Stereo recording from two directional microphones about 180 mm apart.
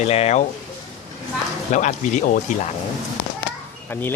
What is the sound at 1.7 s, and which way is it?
Speech, 40° left (ahead or behind).